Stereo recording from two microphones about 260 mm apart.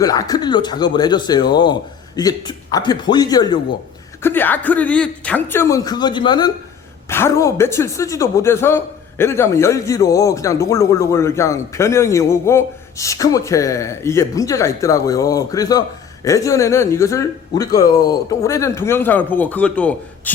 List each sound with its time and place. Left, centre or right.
0.0 s speech: centre